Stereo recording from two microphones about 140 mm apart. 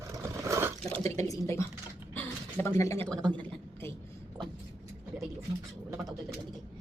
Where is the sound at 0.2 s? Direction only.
20° right (ahead or behind).